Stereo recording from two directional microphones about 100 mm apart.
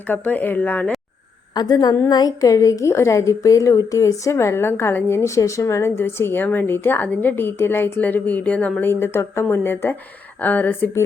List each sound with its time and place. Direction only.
0.1 s speech: 20° left (ahead or behind)
1.5 s a woman's voice: 40° left (ahead or behind); by 11.0 s 20° left (ahead or behind)